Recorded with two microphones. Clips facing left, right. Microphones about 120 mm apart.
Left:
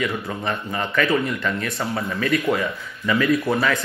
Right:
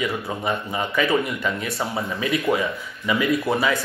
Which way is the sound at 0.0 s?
10° right (ahead or behind).